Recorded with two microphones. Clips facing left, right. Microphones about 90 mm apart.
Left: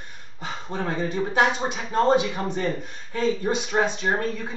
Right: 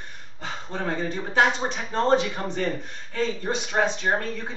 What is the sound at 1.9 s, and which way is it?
A man's voice, 10° left (ahead or behind).